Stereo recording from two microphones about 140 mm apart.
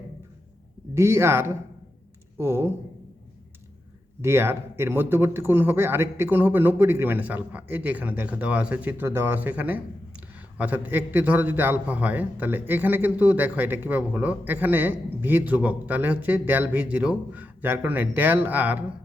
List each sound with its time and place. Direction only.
0.9 s speech: 20° right (ahead or behind)
4.2 s speech: 15° right (ahead or behind)